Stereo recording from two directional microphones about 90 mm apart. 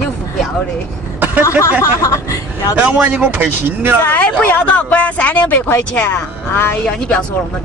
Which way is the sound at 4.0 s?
20° left (ahead or behind).